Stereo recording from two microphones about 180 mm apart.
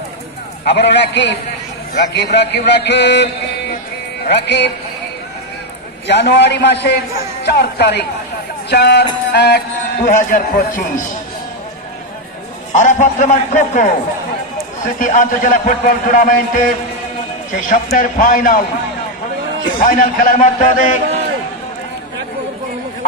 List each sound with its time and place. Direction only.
0.7 s a man's voice: 75° left (ahead or behind)
4.3 s a man's voice: 70° left (ahead or behind)
6.0 s a man's voice: 70° left (ahead or behind); by 11.1 s 50° left (ahead or behind)
12.7 s a man's voice: 40° left (ahead or behind)
15.0 s a man's voice: 45° left (ahead or behind)
19.8 s a man's voice: 50° left (ahead or behind)